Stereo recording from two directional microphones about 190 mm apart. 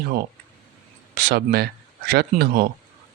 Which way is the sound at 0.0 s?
50° right (ahead or behind).